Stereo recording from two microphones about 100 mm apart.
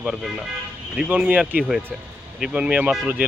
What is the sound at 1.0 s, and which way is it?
Speech, 15° right (ahead or behind).